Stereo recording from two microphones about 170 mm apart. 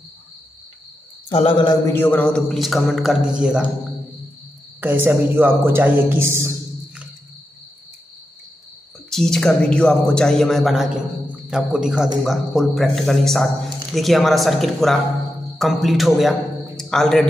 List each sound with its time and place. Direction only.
1.3 s mantra: 30° left (ahead or behind)
1.9 s speech: 10° left (ahead or behind); by 3.6 s 5° right (ahead or behind)
4.7 s a woman's voice: 10° right (ahead or behind)
9.1 s a man's voice: 5° left (ahead or behind)